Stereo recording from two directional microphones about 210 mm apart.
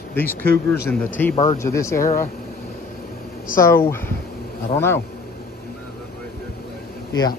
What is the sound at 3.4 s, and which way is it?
Speech, 40° left (ahead or behind).